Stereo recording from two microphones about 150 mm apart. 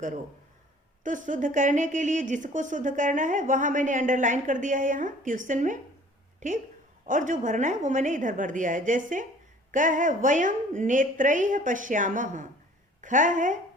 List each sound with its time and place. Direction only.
1.0 s a woman's voice: 60° right (ahead or behind)